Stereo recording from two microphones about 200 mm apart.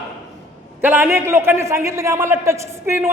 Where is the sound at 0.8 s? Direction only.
10° right (ahead or behind).